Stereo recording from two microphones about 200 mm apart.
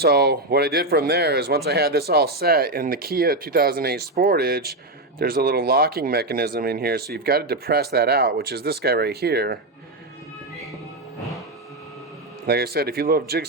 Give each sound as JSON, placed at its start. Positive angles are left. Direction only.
{"t": 0.0, "sound": "speech", "side_deg": -50}
{"t": 12.5, "sound": "speech", "side_deg": -50}